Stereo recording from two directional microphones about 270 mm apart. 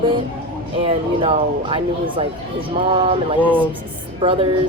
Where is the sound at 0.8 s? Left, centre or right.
Centre.